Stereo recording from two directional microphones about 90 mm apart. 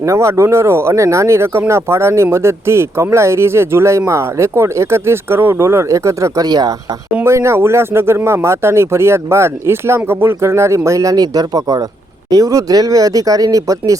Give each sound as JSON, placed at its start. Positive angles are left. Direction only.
{"t": 0.0, "sound": "speech", "side_deg": -35}
{"t": 7.3, "sound": "speech", "side_deg": -30}